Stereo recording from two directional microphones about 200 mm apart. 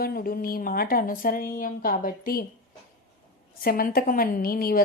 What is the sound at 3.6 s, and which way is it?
Speech, 50° left (ahead or behind).